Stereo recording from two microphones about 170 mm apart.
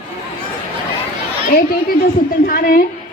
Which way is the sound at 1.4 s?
55° left (ahead or behind).